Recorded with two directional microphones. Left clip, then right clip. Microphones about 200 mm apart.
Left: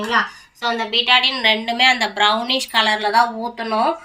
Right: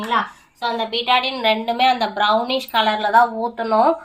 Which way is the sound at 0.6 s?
50° right (ahead or behind).